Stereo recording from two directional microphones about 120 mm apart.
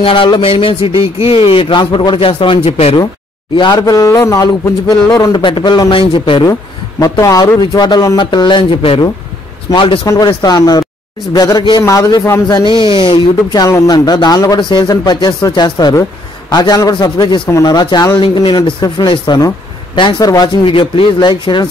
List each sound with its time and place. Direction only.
0.0 s a man's voice: 45° left (ahead or behind)
3.5 s speech: 35° left (ahead or behind)
7.0 s a man's voice: 30° left (ahead or behind)
10.0 s a man's voice: 30° left (ahead or behind)
12.4 s speech: 35° left (ahead or behind)
20.6 s a man's voice: 45° left (ahead or behind)